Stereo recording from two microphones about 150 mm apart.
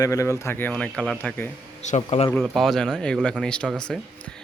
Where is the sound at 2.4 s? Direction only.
Centre (ahead or behind).